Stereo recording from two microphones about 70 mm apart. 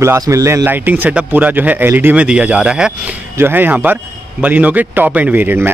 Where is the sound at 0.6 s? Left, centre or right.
Right.